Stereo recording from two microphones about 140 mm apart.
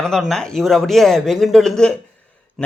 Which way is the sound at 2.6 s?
5° left (ahead or behind).